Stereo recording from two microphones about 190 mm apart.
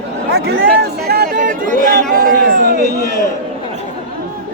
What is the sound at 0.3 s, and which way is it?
Speech, 60° right (ahead or behind).